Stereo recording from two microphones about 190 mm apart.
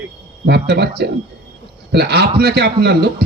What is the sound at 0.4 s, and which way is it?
Speech, 60° right (ahead or behind).